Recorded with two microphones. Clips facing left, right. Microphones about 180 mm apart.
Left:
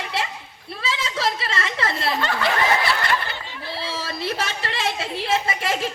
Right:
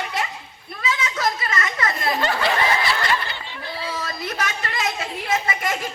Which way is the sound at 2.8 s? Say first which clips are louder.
Even; 55° left (ahead or behind).